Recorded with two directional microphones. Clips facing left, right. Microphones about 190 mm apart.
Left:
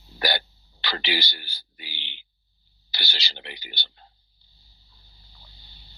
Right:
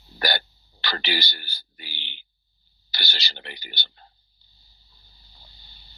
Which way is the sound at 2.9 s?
45° right (ahead or behind).